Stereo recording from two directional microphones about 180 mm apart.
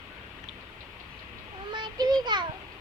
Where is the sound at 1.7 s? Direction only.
25° right (ahead or behind).